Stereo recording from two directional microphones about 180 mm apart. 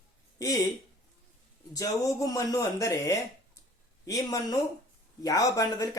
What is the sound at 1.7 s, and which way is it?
Speech, 20° left (ahead or behind).